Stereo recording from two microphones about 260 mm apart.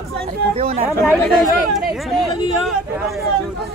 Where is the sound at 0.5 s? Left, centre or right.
Right.